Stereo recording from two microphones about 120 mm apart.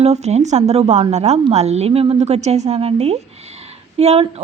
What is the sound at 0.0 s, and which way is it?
A woman's voice, 65° right (ahead or behind).